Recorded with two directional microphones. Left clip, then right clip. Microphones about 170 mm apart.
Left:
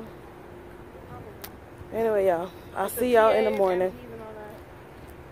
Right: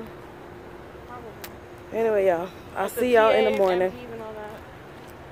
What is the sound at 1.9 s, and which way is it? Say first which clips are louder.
Speech: right 2 dB; 15° left (ahead or behind).